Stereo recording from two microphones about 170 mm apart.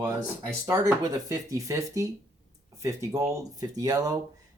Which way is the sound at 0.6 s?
20° right (ahead or behind).